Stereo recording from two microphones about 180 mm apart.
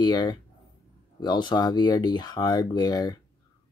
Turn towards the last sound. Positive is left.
turn(degrees=20)  # may be behind; listen again after turning